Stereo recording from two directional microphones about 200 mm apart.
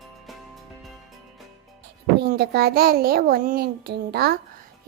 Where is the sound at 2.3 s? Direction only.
50° right (ahead or behind).